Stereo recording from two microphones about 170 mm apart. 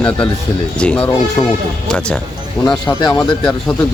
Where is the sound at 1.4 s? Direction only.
25° left (ahead or behind).